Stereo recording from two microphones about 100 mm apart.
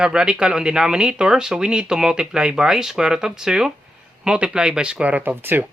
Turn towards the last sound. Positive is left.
turn(degrees=-20)  # may be behind; listen again after turning